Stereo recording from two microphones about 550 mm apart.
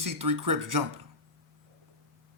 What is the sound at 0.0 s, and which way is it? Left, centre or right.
Speech, right.